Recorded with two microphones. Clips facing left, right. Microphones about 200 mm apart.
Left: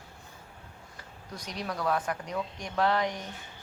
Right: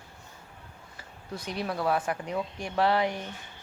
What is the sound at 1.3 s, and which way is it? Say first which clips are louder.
Speech: right 4 dB; 5° right (ahead or behind).